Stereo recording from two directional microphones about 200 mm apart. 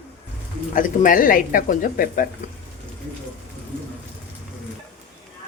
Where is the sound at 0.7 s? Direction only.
45° left (ahead or behind).